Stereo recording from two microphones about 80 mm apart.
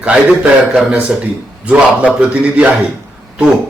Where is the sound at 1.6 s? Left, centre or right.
Centre.